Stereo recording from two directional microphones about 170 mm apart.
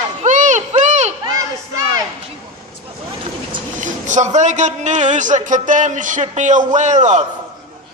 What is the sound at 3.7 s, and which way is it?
A man's voice, 45° right (ahead or behind).